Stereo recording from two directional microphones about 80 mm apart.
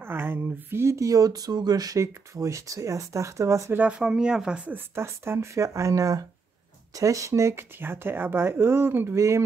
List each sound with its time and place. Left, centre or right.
0.0 s speech: right
2.0 s speech: right
3.7 s speech: centre
4.9 s speech: right